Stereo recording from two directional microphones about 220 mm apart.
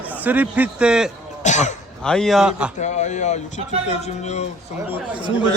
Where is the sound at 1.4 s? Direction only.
30° left (ahead or behind).